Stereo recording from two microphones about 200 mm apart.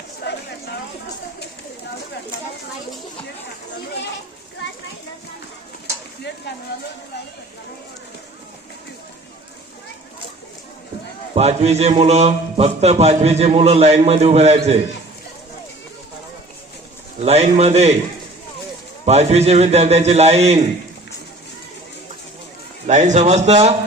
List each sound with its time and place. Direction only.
0.3 s a sound: 55° left (ahead or behind)
11.3 s a man's voice: 30° right (ahead or behind)
17.2 s a man's voice: 30° right (ahead or behind)
19.0 s a man's voice: 30° right (ahead or behind)
22.9 s a man's voice: 35° right (ahead or behind)